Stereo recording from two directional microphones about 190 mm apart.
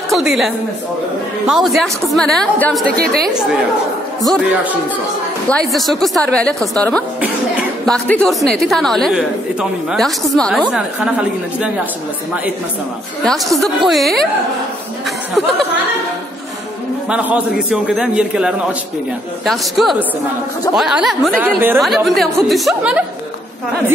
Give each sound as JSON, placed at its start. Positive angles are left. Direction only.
{"t": 0.1, "sound": "a woman's voice", "side_deg": 0}
{"t": 1.5, "sound": "a woman's voice", "side_deg": 0}
{"t": 3.0, "sound": "a woman's voice", "side_deg": -55}
{"t": 4.3, "sound": "a woman's voice", "side_deg": -5}
{"t": 7.8, "sound": "a woman's voice", "side_deg": 5}
{"t": 13.2, "sound": "a woman's voice", "side_deg": 0}
{"t": 17.1, "sound": "a man's voice", "side_deg": -10}